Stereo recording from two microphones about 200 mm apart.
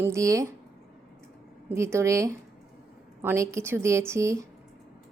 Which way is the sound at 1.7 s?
15° right (ahead or behind).